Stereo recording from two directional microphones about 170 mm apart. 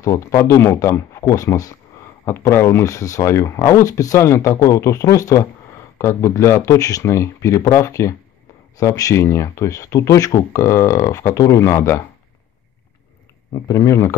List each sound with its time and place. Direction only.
0.0 s speech: 20° left (ahead or behind)
13.5 s speech: 20° left (ahead or behind)